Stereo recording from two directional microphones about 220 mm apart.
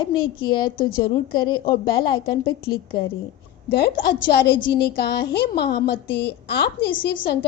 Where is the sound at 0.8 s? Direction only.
40° left (ahead or behind).